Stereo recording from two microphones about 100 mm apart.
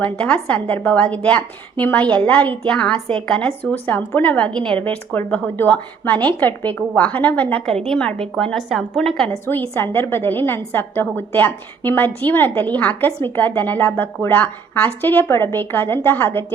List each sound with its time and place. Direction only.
0.0 s a woman's voice: 10° left (ahead or behind)
9.5 s a woman's voice: 20° left (ahead or behind)